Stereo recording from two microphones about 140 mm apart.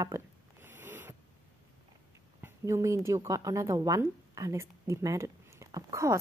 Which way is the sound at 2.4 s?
20° right (ahead or behind).